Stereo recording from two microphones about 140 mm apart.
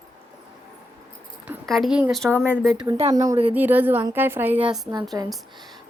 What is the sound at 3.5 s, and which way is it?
A woman's voice, 15° right (ahead or behind).